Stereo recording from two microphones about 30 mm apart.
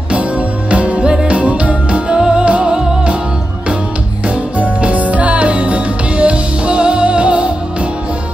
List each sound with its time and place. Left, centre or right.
0.4 s music: right
2.1 s music: right
2.4 s music: right
4.6 s music: right